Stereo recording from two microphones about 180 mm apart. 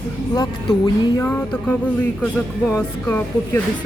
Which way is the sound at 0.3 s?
20° left (ahead or behind).